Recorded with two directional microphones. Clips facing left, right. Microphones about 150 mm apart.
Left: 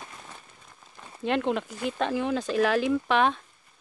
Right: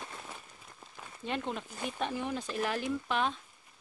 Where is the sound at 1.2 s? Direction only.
90° left; by 3.4 s 75° left (ahead or behind).